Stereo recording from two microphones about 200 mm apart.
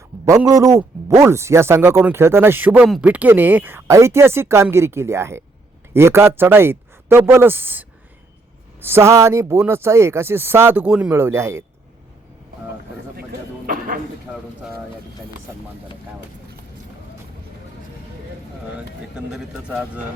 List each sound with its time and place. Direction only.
0.3 s speech: 15° right (ahead or behind)
13.7 s a sound: 40° right (ahead or behind)
19.1 s a man's voice: 5° right (ahead or behind)